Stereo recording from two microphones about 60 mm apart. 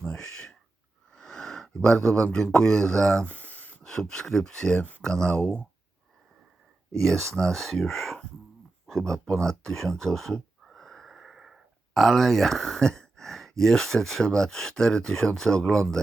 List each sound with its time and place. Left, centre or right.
0.0 s a sound: centre
1.1 s speech: centre
3.2 s a sound: left
3.8 s speech: centre
4.8 s speech: left
5.0 s speech: centre
7.0 s speech: centre
10.6 s wheeze: centre
11.9 s speech: centre